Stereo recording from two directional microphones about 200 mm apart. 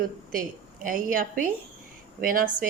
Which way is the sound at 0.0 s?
45° right (ahead or behind).